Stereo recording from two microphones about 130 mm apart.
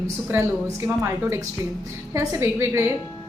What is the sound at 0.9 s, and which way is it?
A woman's voice, 20° right (ahead or behind).